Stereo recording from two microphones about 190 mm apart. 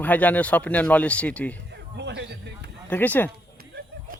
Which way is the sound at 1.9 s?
65° right (ahead or behind).